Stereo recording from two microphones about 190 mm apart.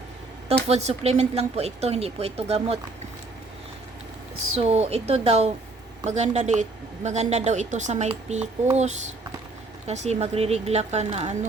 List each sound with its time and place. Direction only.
0.7 s a woman's voice: 35° right (ahead or behind)
4.5 s a woman's voice: 35° right (ahead or behind)